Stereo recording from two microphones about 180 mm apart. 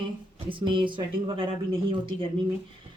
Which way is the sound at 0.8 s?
30° right (ahead or behind).